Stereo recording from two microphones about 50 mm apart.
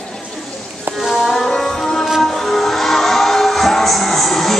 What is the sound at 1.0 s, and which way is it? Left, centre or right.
Music, centre.